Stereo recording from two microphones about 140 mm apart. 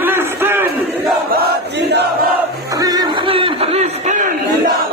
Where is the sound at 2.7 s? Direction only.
25° right (ahead or behind); by 4.3 s 60° right (ahead or behind).